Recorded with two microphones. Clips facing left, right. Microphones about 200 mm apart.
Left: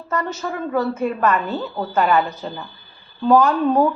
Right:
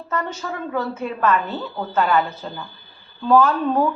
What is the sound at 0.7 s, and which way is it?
Speech, 10° left (ahead or behind).